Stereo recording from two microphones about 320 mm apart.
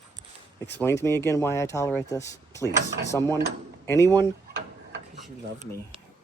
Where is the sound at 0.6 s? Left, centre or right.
Centre.